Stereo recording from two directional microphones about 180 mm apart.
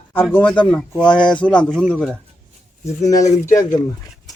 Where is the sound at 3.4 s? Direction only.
20° left (ahead or behind).